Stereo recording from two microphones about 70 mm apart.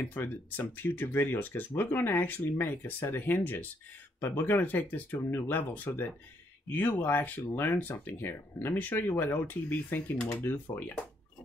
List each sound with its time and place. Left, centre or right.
0.0 s speech: left